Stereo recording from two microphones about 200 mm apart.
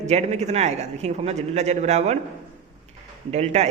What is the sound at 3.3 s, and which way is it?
Speech, 35° right (ahead or behind).